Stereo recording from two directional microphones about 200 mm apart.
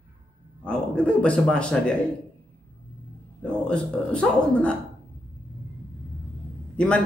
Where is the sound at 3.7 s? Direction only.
5° left (ahead or behind).